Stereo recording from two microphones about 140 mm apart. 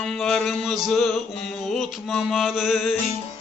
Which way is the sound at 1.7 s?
Centre (ahead or behind).